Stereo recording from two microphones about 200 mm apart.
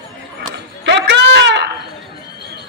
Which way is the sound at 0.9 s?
60° right (ahead or behind).